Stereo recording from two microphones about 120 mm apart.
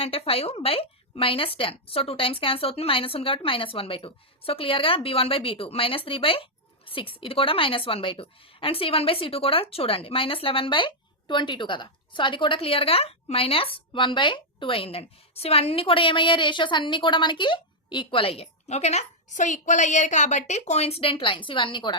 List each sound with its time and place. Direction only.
0.0 s a woman's voice: 55° left (ahead or behind)